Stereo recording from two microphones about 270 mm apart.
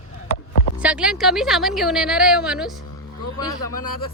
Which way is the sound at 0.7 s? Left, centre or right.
Centre.